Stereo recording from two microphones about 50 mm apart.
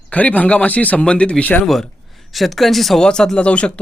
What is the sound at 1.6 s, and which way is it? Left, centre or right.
A woman's voice, centre.